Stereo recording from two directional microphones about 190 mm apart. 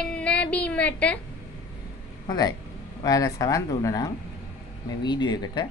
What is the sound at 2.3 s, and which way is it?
A man's voice, 20° left (ahead or behind).